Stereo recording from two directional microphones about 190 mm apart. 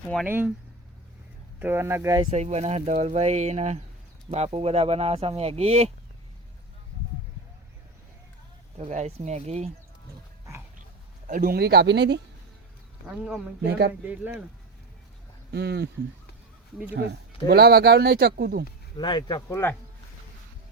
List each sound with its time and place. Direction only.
0.3 s speech: 10° right (ahead or behind)
1.5 s speech: 10° right (ahead or behind)
2.3 s speech: 35° right (ahead or behind)
8.9 s speech: 35° right (ahead or behind)
11.3 s speech: 50° right (ahead or behind)
13.1 s a man's voice: 5° right (ahead or behind)
13.7 s speech: 60° right (ahead or behind)
14.0 s speech: 10° right (ahead or behind)
15.5 s speech: 60° right (ahead or behind)
17.4 s speech: 55° right (ahead or behind)
18.9 s speech: 25° left (ahead or behind)